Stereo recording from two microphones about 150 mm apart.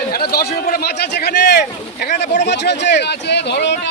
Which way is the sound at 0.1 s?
85° left.